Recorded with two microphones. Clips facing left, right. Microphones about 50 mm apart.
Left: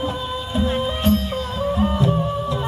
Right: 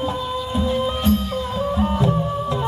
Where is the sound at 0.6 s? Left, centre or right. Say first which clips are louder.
Left 1 dB; left.